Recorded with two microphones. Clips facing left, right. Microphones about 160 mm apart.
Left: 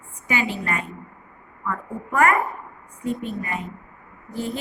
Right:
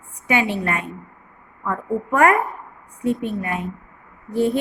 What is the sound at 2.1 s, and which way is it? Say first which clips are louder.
Speech: right 3 dB; 70° right (ahead or behind).